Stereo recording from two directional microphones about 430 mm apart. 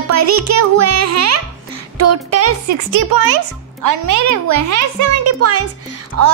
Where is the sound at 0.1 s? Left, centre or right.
Right.